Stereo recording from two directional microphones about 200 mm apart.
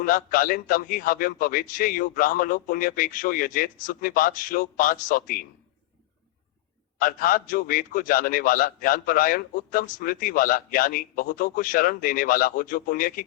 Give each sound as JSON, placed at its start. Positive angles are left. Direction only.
{"t": 0.0, "sound": "a man's voice", "side_deg": 45}
{"t": 7.0, "sound": "a man's voice", "side_deg": 45}